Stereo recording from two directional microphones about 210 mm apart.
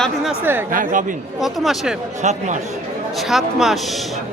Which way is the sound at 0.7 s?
40° right (ahead or behind).